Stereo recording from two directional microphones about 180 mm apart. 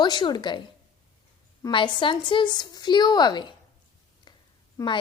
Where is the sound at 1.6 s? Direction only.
25° left (ahead or behind).